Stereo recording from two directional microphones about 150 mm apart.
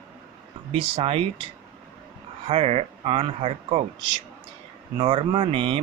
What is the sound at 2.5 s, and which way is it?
Speech, 40° right (ahead or behind).